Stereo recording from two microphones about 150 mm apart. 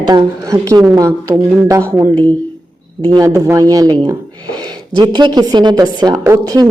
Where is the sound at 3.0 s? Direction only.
25° right (ahead or behind).